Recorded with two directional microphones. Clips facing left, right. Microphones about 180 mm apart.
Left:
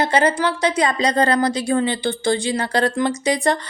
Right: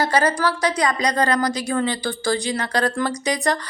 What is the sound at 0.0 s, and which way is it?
Speech, 25° left (ahead or behind).